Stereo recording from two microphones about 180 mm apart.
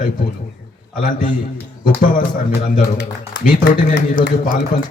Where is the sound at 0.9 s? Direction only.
50° left (ahead or behind).